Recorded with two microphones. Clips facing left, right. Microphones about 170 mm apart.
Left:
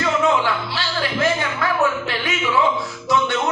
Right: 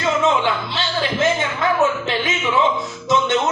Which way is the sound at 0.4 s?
20° right (ahead or behind).